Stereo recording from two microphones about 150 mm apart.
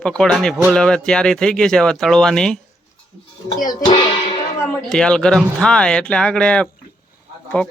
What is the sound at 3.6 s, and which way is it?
Speech, 25° left (ahead or behind).